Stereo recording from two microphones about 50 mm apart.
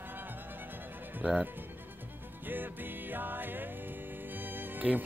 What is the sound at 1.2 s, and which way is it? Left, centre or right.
Speech, centre.